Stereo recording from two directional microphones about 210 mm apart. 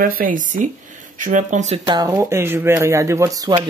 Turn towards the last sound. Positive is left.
turn(degrees=-15)  # may be behind; listen again after turning